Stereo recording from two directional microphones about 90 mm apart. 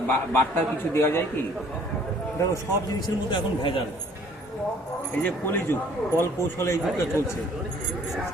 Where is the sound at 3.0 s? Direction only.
65° left (ahead or behind).